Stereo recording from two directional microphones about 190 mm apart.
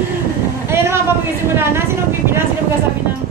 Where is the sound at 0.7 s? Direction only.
15° right (ahead or behind).